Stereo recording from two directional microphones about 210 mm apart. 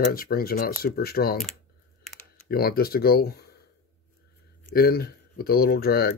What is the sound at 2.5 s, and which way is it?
Speech, 45° left (ahead or behind).